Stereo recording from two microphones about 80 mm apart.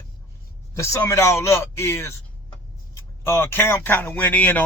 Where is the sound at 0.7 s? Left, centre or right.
Left.